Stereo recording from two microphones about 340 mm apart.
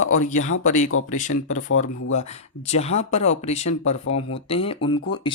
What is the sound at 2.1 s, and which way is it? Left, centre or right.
Speech, centre.